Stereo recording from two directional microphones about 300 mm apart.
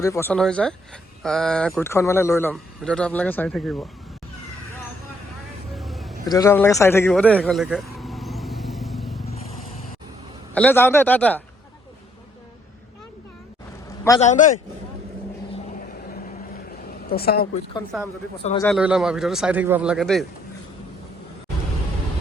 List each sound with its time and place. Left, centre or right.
0.0 s speech: centre
5.7 s vehicle: centre
6.2 s vehicle: centre
10.5 s speech: centre
14.2 s a man's voice: left
16.9 s a woman's voice: left
18.6 s speech: centre